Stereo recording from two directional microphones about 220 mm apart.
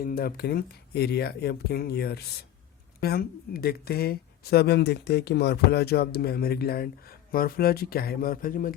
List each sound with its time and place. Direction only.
0.0 s speech: 40° left (ahead or behind)